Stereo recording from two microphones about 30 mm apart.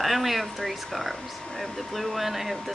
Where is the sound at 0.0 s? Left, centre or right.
Centre.